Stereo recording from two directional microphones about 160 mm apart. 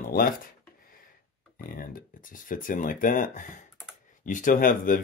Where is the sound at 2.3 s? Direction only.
55° left (ahead or behind).